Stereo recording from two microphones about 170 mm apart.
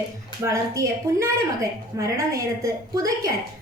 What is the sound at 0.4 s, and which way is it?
A woman's voice, 20° right (ahead or behind).